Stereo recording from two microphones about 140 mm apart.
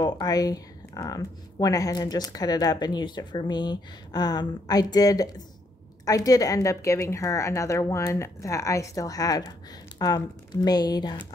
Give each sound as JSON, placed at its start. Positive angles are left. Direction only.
{"t": 0.0, "sound": "speech", "side_deg": 30}